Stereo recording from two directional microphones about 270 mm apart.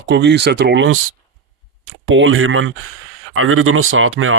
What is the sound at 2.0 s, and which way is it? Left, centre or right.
Speech, right.